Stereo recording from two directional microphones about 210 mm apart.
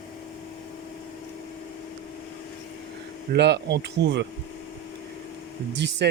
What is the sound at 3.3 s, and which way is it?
Speech, 50° right (ahead or behind).